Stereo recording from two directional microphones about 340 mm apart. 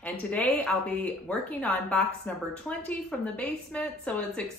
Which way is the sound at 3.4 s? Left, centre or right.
Centre.